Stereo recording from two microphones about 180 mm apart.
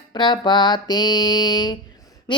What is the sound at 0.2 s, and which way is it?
Child singing, 25° left (ahead or behind).